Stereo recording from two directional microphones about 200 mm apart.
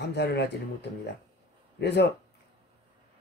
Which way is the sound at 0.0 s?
55° left (ahead or behind).